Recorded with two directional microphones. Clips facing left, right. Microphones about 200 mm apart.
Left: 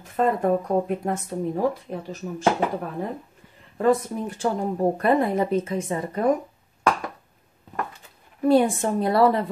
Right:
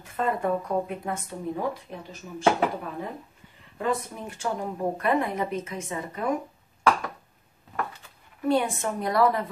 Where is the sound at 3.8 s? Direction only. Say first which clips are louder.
Left 8 dB; 40° left (ahead or behind).